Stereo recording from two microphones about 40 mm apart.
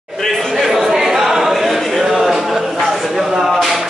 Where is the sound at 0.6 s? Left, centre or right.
Centre.